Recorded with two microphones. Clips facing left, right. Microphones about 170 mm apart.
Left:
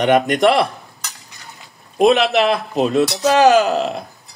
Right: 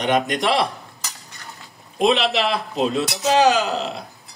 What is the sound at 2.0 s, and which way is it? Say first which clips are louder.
Speech: left 5 dB; 50° left (ahead or behind).